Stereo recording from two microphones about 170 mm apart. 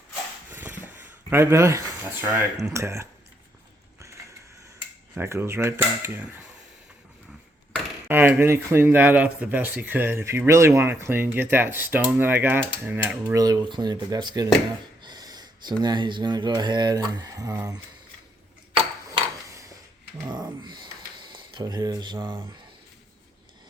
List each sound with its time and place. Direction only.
0.5 s wood: 10° right (ahead or behind)
1.3 s speech: 15° right (ahead or behind)
5.1 s speech: 15° right (ahead or behind)
8.0 s speech: 10° right (ahead or behind)
13.3 s speech: 20° right (ahead or behind)
15.0 s a sound: 25° right (ahead or behind)
15.8 s speech: 25° right (ahead or behind)
19.5 s a sound: 20° right (ahead or behind)
20.2 s speech: 25° right (ahead or behind)